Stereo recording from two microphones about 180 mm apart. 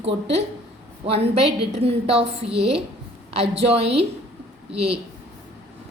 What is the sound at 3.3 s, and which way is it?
A woman's voice, 35° right (ahead or behind).